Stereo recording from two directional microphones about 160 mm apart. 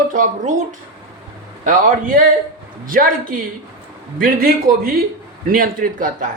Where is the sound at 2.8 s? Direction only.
60° right (ahead or behind).